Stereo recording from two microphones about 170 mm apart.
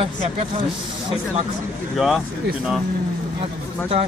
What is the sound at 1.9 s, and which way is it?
Speech, centre (ahead or behind).